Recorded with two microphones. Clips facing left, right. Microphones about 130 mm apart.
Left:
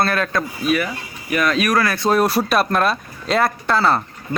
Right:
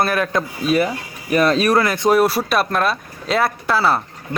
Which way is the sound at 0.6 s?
30° right (ahead or behind).